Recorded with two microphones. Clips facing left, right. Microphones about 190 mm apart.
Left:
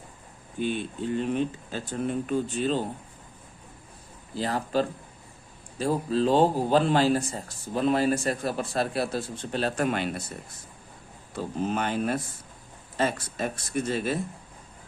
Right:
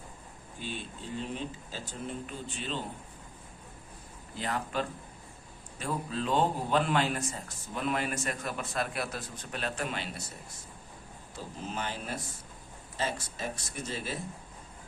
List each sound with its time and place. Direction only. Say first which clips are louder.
0.6 s speech: left 11 dB; 60° left (ahead or behind); by 2.8 s 40° left (ahead or behind)
4.4 s a man's voice: left 7 dB; 35° left (ahead or behind); by 10.2 s 55° left (ahead or behind)
11.3 s speech: left 10 dB; 60° left (ahead or behind)